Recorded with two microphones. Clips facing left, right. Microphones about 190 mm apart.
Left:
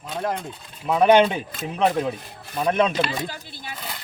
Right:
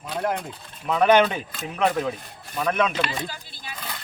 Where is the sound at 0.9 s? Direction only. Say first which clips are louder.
Left 2 dB; 20° left (ahead or behind).